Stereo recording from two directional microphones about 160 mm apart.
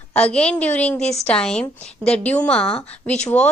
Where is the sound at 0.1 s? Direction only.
5° left (ahead or behind).